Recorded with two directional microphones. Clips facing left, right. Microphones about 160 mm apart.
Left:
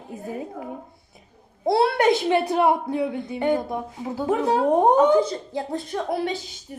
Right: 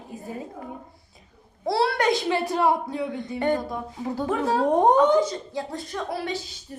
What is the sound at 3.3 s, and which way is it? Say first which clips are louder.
Speech: left 1 dB; 5° left (ahead or behind).